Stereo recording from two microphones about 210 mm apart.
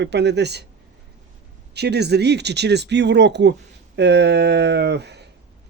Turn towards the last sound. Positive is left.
turn(degrees=-55)  # may be behind; listen again after turning